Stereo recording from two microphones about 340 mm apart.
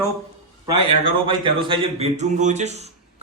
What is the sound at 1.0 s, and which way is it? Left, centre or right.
Speech, centre.